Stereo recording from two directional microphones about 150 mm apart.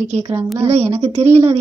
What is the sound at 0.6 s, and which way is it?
Speech, 45° right (ahead or behind).